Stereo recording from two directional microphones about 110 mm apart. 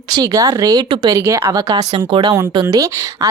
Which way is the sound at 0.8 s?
50° right (ahead or behind).